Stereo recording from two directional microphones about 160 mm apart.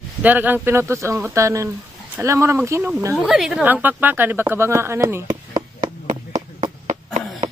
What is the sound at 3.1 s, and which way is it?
A woman's voice, 5° right (ahead or behind).